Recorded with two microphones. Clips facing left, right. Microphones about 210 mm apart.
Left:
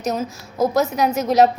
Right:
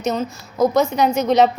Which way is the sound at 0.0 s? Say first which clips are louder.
Right 2 dB; centre (ahead or behind).